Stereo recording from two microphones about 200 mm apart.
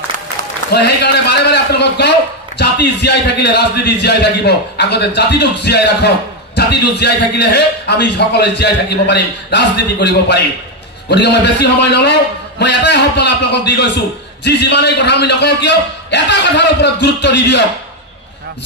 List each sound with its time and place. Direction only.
0.7 s a man's voice: 60° left (ahead or behind)